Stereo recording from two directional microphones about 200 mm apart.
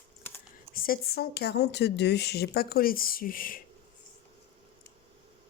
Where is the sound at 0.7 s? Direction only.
50° left (ahead or behind).